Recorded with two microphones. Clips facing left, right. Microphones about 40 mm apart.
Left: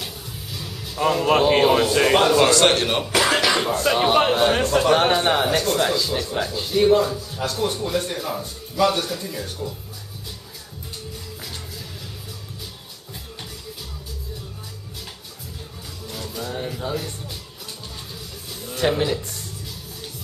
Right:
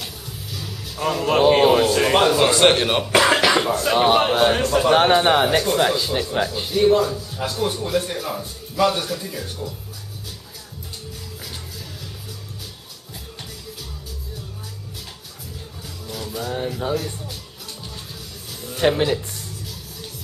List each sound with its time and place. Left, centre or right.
0.0 s music: centre
1.5 s a man's voice: centre
2.5 s a man's voice: centre
3.1 s music: centre
4.3 s a man's voice: centre
4.9 s a man's voice: centre
6.7 s a man's voice: centre
16.1 s music: centre
18.8 s speech: centre